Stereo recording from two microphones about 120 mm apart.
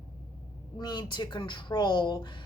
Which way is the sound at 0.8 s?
35° left (ahead or behind).